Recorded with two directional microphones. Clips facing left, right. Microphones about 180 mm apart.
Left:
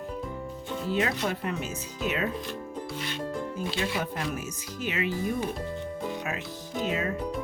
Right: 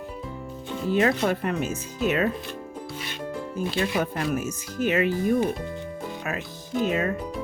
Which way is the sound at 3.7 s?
50° right (ahead or behind).